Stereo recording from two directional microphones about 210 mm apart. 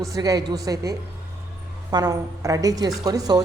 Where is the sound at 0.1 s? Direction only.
15° right (ahead or behind).